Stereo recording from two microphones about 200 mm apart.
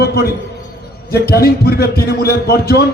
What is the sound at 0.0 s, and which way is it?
Speech, 50° left (ahead or behind).